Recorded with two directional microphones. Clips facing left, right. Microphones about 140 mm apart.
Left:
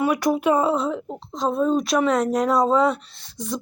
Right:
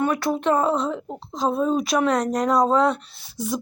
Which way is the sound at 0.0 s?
10° left (ahead or behind).